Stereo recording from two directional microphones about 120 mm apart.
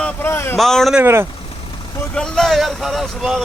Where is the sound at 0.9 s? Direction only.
20° right (ahead or behind).